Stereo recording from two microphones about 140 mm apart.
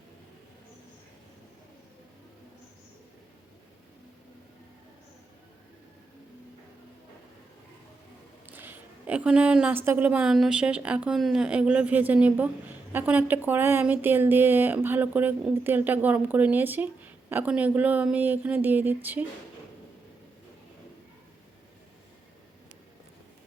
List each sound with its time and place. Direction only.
8.4 s a woman's voice: 15° right (ahead or behind)